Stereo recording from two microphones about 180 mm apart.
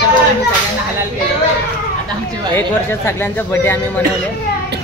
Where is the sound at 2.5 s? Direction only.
15° left (ahead or behind).